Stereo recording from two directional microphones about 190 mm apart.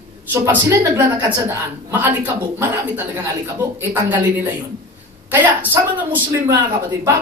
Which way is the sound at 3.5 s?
15° right (ahead or behind).